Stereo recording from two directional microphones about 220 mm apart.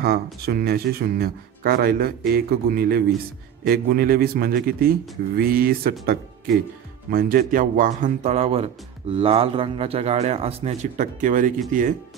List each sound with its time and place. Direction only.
0.0 s a man's voice: 45° right (ahead or behind)